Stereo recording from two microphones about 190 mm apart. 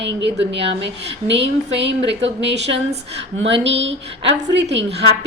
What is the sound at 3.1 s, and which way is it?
A woman's voice, 70° right (ahead or behind).